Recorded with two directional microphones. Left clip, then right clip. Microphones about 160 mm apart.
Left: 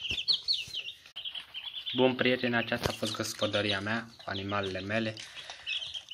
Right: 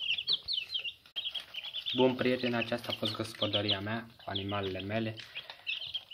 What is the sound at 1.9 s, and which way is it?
Speech, 5° left (ahead or behind).